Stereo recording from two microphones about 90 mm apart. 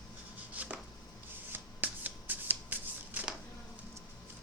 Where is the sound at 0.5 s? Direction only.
15° right (ahead or behind).